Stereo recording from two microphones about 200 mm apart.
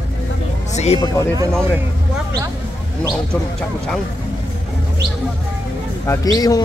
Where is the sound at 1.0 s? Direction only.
15° left (ahead or behind).